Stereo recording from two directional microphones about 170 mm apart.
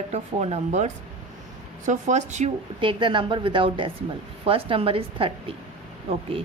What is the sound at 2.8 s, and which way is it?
A woman's voice, 30° right (ahead or behind).